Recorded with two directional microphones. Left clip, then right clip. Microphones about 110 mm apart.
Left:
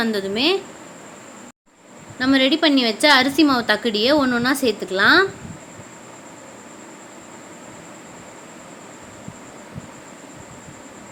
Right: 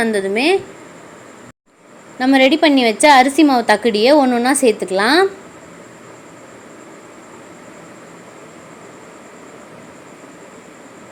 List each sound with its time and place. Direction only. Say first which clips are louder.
0.0 s speech: right 4 dB; 10° right (ahead or behind)
2.1 s a woman's voice: right 5 dB; 20° right (ahead or behind)